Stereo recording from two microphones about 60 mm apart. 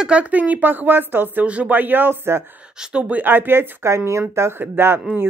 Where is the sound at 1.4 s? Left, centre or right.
Right.